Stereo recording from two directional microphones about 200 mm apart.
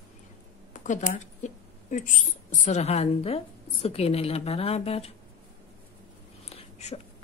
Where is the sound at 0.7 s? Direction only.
40° left (ahead or behind).